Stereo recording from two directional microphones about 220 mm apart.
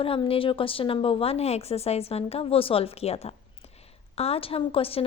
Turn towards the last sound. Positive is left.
turn(degrees=25)  # may be behind; listen again after turning